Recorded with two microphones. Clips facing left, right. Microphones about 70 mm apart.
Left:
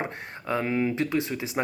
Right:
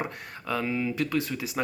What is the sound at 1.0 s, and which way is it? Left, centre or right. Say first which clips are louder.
Speech: left 1 dB; left.